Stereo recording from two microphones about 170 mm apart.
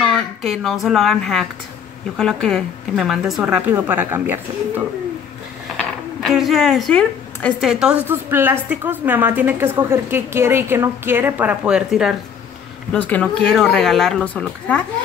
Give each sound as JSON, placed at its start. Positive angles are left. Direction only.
{"t": 0.0, "sound": "a sound", "side_deg": 0}
{"t": 0.8, "sound": "a woman's voice", "side_deg": 0}
{"t": 5.8, "sound": "speech", "side_deg": 0}
{"t": 7.7, "sound": "a woman's voice", "side_deg": -5}
{"t": 12.9, "sound": "a woman's voice", "side_deg": 10}